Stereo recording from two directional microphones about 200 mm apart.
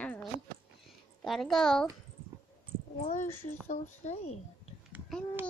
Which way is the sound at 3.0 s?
35° left (ahead or behind).